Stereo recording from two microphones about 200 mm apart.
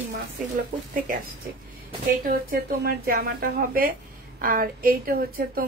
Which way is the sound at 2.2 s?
50° right (ahead or behind).